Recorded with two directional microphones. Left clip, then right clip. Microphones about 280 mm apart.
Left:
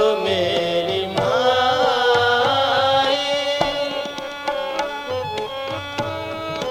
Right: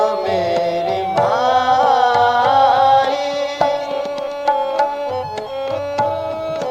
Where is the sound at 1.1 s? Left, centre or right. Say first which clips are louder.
Right 3 dB; right.